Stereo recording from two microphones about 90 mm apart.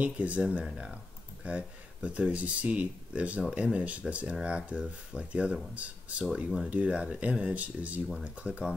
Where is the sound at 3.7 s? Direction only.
15° right (ahead or behind).